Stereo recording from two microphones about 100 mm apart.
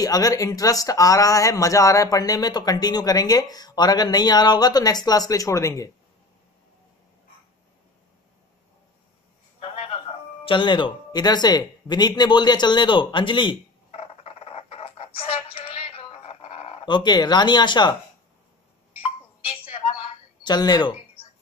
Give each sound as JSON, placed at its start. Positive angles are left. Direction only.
{"t": 0.0, "sound": "speech", "side_deg": 35}
{"t": 9.6, "sound": "music", "side_deg": 75}
{"t": 11.1, "sound": "speech", "side_deg": 45}
{"t": 13.9, "sound": "music", "side_deg": 90}
{"t": 16.8, "sound": "speech", "side_deg": 50}
{"t": 19.4, "sound": "a sound", "side_deg": 65}
{"t": 20.4, "sound": "speech", "side_deg": 45}